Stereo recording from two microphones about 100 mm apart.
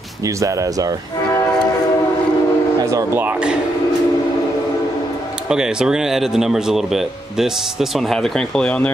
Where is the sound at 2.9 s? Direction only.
20° right (ahead or behind).